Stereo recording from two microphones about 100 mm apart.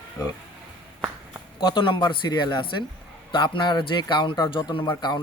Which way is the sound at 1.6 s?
50° left (ahead or behind).